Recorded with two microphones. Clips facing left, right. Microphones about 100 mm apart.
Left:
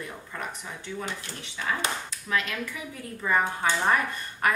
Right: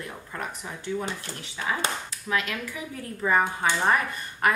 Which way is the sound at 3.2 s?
10° right (ahead or behind).